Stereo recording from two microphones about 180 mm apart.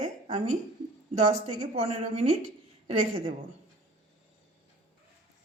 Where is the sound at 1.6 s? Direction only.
35° right (ahead or behind).